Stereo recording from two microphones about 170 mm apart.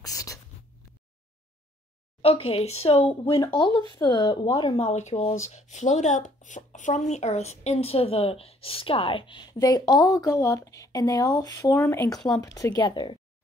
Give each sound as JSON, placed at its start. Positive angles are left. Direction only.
{"t": 0.0, "sound": "a sound", "side_deg": 20}
{"t": 2.2, "sound": "speech", "side_deg": 35}
{"t": 4.7, "sound": "a woman's voice", "side_deg": 40}